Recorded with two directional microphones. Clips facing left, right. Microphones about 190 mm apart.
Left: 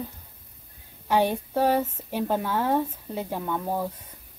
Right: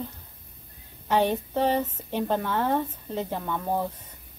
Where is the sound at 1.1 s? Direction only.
10° left (ahead or behind).